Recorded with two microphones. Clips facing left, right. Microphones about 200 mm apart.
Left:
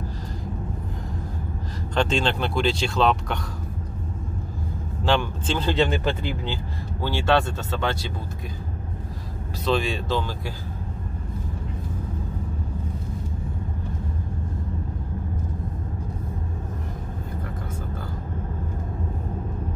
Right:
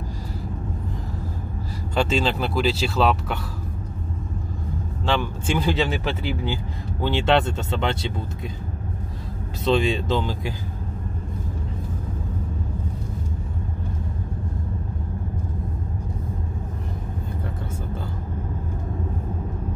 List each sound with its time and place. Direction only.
2.0 s speech: 5° right (ahead or behind)
5.0 s speech: centre (ahead or behind); by 8.1 s 20° right (ahead or behind)
9.7 s speech: 20° right (ahead or behind)